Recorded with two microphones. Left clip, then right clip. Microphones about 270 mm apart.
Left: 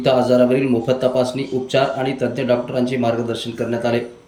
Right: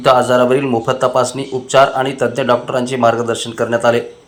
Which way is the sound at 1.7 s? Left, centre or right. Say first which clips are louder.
Right 8 dB; right.